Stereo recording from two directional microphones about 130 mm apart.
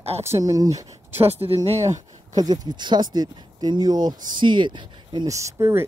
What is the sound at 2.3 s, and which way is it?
Speech, 30° right (ahead or behind).